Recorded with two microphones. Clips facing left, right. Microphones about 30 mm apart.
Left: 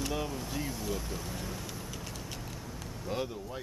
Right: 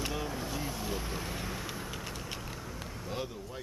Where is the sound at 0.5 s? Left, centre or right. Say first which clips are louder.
Even; centre.